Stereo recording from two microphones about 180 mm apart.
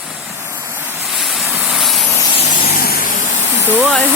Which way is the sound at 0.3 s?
15° right (ahead or behind).